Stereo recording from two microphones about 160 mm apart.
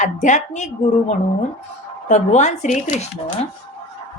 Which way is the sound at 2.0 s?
50° left (ahead or behind).